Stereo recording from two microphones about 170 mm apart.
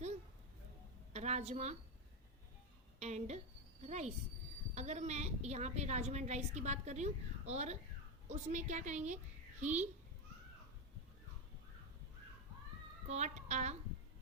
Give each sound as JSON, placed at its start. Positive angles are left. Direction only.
{"t": 1.1, "sound": "a woman's voice", "side_deg": -40}
{"t": 3.0, "sound": "a woman's voice", "side_deg": -40}
{"t": 13.1, "sound": "speech", "side_deg": -40}